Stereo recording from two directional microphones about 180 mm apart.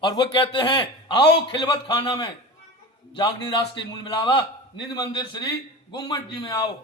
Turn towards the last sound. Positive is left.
turn(degrees=20)  # may be behind; listen again after turning